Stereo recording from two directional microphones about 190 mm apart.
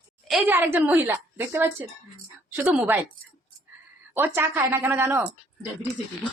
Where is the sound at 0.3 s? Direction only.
5° right (ahead or behind).